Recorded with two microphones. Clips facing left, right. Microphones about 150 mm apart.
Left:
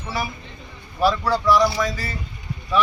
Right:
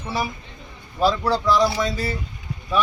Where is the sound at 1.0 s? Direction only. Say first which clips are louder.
Even; 25° right (ahead or behind).